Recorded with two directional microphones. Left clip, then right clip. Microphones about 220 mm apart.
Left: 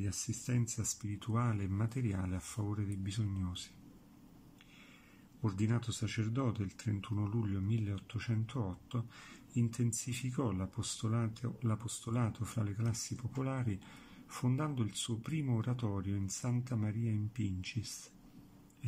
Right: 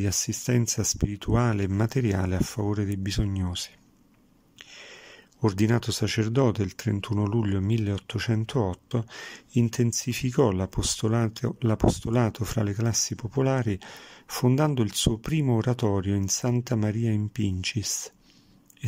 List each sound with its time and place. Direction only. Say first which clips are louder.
0.0 s speech: right 14 dB; 45° right (ahead or behind)
5.4 s speech: right 14 dB; 45° right (ahead or behind)